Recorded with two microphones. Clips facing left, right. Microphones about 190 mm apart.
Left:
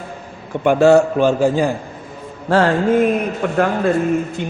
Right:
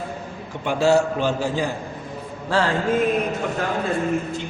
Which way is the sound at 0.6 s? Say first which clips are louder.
Left 7 dB; 55° left (ahead or behind).